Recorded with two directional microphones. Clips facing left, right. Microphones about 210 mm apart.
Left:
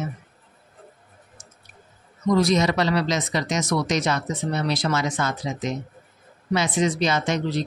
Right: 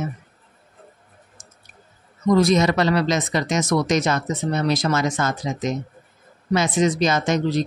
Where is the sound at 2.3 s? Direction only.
50° right (ahead or behind).